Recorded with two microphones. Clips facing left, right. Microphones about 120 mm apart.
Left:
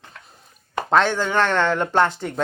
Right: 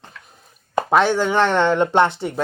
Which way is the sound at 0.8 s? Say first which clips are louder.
Right 2 dB; 15° right (ahead or behind).